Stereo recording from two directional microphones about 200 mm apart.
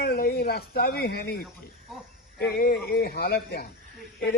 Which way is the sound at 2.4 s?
50° left (ahead or behind).